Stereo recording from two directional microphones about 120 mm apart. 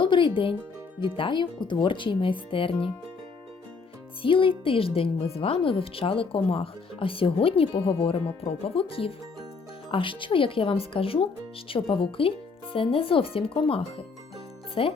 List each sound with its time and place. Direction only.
0.0 s speech: 45° left (ahead or behind)
4.2 s speech: 45° left (ahead or behind)